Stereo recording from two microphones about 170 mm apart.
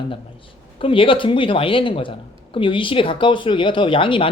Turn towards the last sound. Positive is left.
turn(degrees=30)  # may be behind; listen again after turning